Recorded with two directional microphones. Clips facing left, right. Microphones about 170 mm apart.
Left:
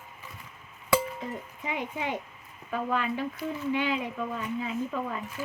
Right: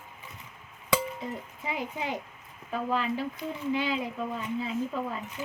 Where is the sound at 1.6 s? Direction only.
35° right (ahead or behind).